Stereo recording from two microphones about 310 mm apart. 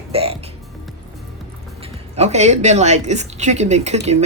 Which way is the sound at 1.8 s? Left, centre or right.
Right.